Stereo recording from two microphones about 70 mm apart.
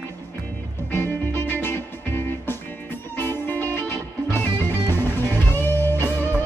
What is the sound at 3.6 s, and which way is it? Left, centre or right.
Music, right.